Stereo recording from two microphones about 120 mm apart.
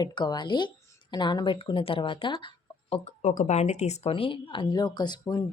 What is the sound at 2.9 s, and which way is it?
Speech, 75° left (ahead or behind).